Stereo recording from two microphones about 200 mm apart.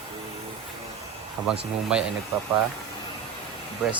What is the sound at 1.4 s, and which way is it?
Speech, 5° right (ahead or behind).